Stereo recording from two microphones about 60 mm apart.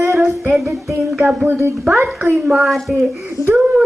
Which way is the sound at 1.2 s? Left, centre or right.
Right.